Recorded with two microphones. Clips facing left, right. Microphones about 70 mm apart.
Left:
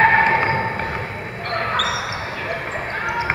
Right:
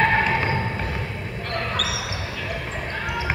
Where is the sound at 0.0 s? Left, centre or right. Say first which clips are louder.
Left 5 dB; left.